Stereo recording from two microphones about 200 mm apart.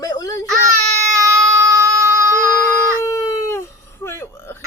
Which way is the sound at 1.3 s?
15° right (ahead or behind).